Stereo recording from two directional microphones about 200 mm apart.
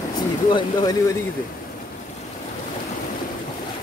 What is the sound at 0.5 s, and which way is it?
Speech, 20° left (ahead or behind).